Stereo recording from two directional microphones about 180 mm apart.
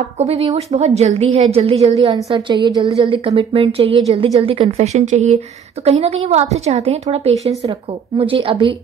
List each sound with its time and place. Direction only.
0.2 s a woman's voice: 35° right (ahead or behind)